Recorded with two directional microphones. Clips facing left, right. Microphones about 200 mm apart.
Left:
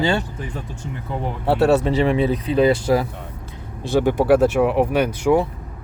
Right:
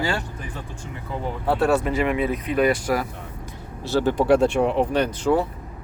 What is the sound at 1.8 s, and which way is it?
Speech, 30° left (ahead or behind).